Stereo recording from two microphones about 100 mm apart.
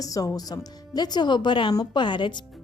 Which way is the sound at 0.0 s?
35° left (ahead or behind).